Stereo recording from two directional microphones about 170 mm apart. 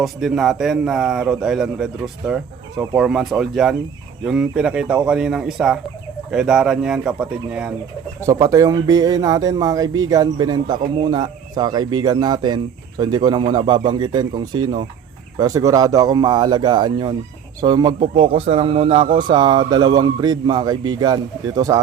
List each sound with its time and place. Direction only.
0.0 s speech: centre (ahead or behind)
8.3 s speech: 20° right (ahead or behind)
18.3 s speech: 35° right (ahead or behind)